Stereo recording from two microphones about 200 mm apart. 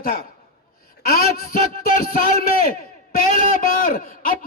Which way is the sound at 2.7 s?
45° left (ahead or behind).